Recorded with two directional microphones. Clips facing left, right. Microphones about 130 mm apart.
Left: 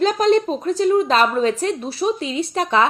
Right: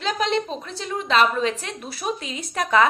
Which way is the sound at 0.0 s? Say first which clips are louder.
Left 8 dB; 45° left (ahead or behind).